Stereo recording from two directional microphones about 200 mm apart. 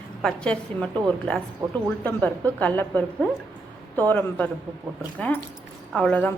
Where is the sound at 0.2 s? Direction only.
5° left (ahead or behind).